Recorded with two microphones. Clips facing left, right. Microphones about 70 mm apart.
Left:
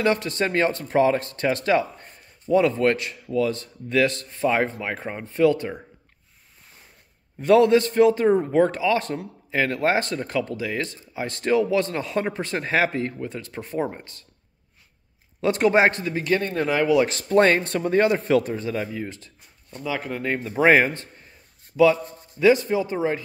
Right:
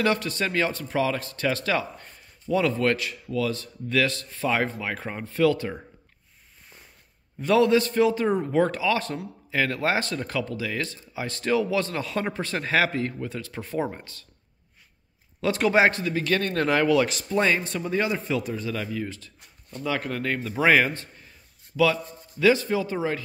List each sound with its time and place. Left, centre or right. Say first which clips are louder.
0.0 s speech: left 2 dB; left
7.3 s speech: left 4 dB; left
15.4 s speech: left 2 dB; left; by 17.0 s centre
17.1 s speech: left 6 dB; left
18.5 s speech: left 3 dB; left
19.8 s speech: even; centre; by 21.1 s left
22.4 s speech: left 3 dB; left